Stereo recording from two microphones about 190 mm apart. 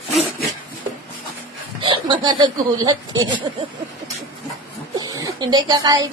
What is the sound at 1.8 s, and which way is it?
A woman's voice, 25° right (ahead or behind).